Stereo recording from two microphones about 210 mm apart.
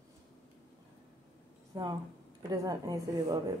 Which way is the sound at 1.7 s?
20° right (ahead or behind).